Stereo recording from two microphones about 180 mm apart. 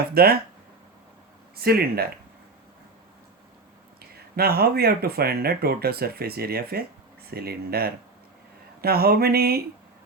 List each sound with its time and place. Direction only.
0.1 s speech: 55° right (ahead or behind)
1.5 s speech: 60° right (ahead or behind)
4.1 s speech: 60° right (ahead or behind)